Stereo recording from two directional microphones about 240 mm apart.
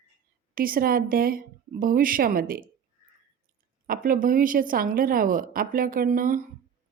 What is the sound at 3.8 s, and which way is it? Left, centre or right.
A woman's voice, right.